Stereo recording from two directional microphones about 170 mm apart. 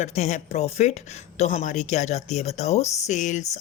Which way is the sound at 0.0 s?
45° left (ahead or behind).